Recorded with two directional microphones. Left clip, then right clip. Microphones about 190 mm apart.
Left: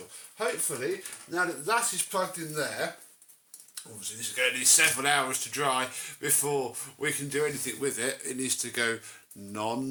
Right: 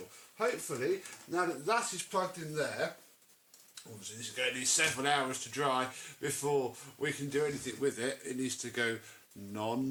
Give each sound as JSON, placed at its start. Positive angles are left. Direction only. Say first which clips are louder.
{"t": 0.7, "sound": "speech", "louder": "left 2 dB", "side_deg": 0}
{"t": 1.7, "sound": "speech", "louder": "left 4 dB", "side_deg": 15}
{"t": 4.2, "sound": "speech", "louder": "left 7 dB", "side_deg": 15}